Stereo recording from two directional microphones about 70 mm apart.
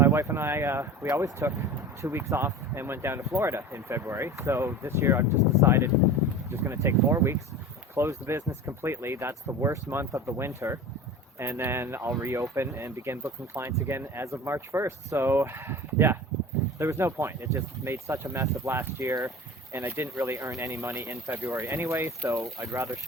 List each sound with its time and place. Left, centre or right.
0.0 s speech: right
22.2 s speech: right